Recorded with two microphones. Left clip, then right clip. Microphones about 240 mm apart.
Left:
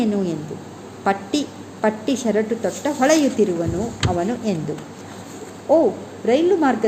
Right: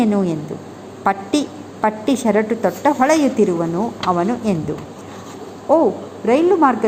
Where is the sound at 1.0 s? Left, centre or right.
Centre.